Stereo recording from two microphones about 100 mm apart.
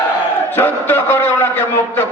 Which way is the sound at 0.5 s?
20° left (ahead or behind).